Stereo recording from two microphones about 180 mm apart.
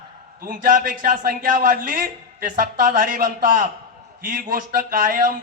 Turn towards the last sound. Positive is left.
turn(degrees=-55)  # may be behind; listen again after turning